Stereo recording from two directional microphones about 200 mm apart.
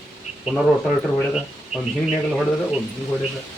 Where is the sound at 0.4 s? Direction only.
5° right (ahead or behind).